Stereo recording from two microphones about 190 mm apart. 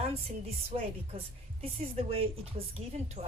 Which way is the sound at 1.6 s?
30° right (ahead or behind).